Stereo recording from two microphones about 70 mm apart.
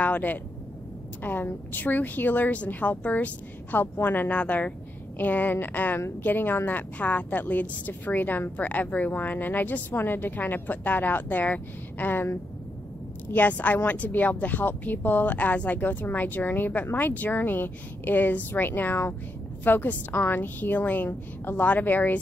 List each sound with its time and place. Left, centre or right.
0.0 s a woman's voice: left